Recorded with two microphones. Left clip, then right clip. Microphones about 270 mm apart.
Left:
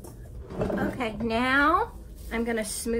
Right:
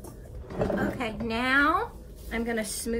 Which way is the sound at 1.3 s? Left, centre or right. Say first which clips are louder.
Left 1 dB; left.